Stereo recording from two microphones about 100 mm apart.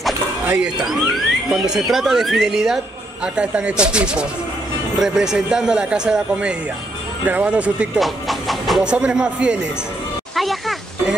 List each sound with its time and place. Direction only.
0.8 s speech: 5° right (ahead or behind)
8.0 s speech: centre (ahead or behind)
10.3 s a sound: centre (ahead or behind)